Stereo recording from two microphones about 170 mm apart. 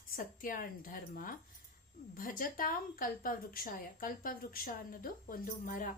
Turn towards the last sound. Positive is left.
turn(degrees=55)  # may be behind; listen again after turning